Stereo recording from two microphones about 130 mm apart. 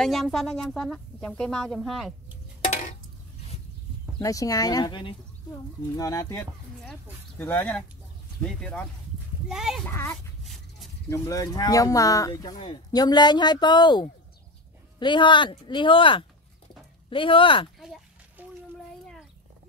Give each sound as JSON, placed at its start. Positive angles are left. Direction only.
{"t": 0.0, "sound": "speech", "side_deg": 0}
{"t": 2.6, "sound": "dishes", "side_deg": 70}
{"t": 4.2, "sound": "speech", "side_deg": 25}
{"t": 6.9, "sound": "speech", "side_deg": 15}
{"t": 9.8, "sound": "speech", "side_deg": 20}
{"t": 10.4, "sound": "a sound", "side_deg": 0}
{"t": 11.1, "sound": "speech", "side_deg": 25}
{"t": 18.4, "sound": "a sound", "side_deg": -15}